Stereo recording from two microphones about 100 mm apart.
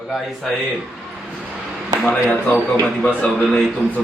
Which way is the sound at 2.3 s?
15° left (ahead or behind).